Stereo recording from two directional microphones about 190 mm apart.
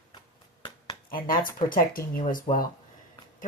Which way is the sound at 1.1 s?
50° left (ahead or behind).